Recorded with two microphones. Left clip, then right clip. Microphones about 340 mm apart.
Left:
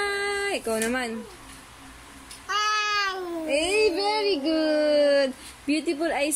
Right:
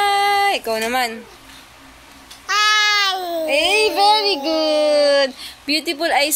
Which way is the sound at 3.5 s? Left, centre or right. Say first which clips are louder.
Right 6 dB; right.